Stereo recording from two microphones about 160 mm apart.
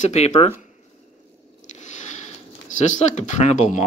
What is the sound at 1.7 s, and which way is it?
Squish, 50° left (ahead or behind).